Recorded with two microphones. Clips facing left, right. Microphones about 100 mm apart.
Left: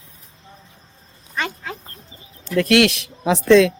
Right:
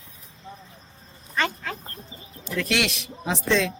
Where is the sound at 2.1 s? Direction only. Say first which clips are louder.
Right 2 dB; 10° right (ahead or behind).